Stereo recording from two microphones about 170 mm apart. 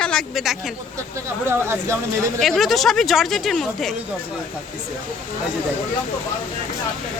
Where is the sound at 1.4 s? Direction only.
15° right (ahead or behind).